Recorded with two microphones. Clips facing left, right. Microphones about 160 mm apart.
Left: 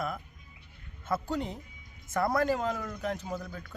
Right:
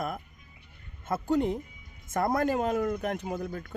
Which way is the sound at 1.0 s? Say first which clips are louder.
Right 5 dB; 45° right (ahead or behind).